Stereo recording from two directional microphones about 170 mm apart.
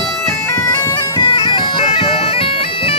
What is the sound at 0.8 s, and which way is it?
Bagpipes, 30° left (ahead or behind).